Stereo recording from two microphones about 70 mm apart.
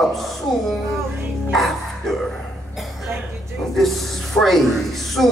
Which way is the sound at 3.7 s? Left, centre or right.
Centre.